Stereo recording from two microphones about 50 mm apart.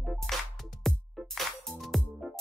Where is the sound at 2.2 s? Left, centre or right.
Centre.